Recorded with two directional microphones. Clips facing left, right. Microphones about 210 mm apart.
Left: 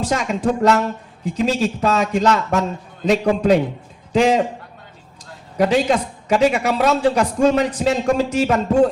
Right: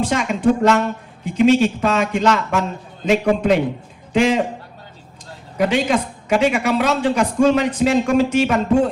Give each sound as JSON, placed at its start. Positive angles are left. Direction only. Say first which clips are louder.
{"t": 0.0, "sound": "a woman's voice", "louder": "right 2 dB", "side_deg": 35}
{"t": 5.5, "sound": "a woman's voice", "louder": "left 1 dB", "side_deg": 35}